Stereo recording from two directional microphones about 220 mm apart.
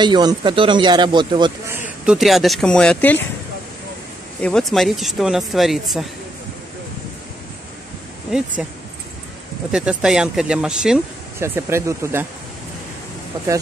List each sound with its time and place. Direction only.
0.0 s speech: 20° right (ahead or behind)
1.7 s speech: centre (ahead or behind)
4.4 s speech: 5° left (ahead or behind)
8.3 s speech: 5° right (ahead or behind)
9.7 s speech: 5° right (ahead or behind)